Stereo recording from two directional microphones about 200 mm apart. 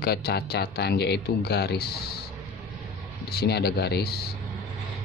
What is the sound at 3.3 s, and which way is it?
Speech, 55° left (ahead or behind).